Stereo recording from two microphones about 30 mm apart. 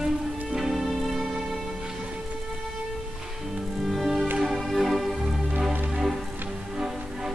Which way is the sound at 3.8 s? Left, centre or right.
Centre.